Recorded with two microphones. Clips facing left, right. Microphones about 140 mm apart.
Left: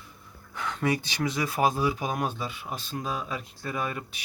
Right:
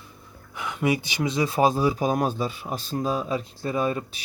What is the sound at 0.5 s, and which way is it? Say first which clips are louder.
Speech: right 3 dB; 10° right (ahead or behind).